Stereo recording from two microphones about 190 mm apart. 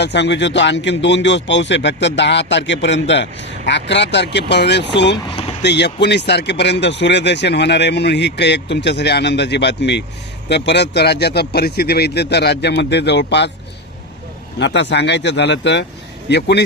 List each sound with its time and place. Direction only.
0.0 s a man's voice: 65° left (ahead or behind)
14.6 s a man's voice: 65° left (ahead or behind)